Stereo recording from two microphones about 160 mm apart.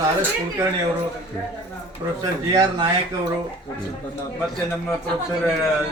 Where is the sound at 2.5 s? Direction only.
25° right (ahead or behind).